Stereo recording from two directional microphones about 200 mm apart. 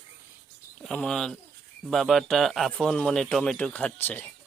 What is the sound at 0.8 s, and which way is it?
Speech, 5° left (ahead or behind).